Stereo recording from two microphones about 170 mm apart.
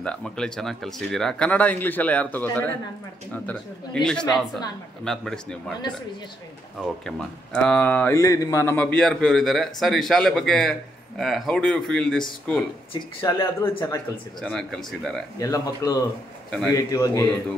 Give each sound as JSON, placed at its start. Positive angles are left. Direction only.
{"t": 0.0, "sound": "speech", "side_deg": 5}
{"t": 6.8, "sound": "speech", "side_deg": 5}
{"t": 13.2, "sound": "speech", "side_deg": 20}
{"t": 14.4, "sound": "speech", "side_deg": 5}
{"t": 15.3, "sound": "speech", "side_deg": 20}
{"t": 16.4, "sound": "a man's voice", "side_deg": 5}
{"t": 16.7, "sound": "speech", "side_deg": 20}